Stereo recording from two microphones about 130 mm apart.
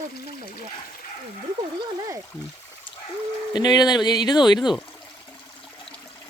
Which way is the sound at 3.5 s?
30° left (ahead or behind).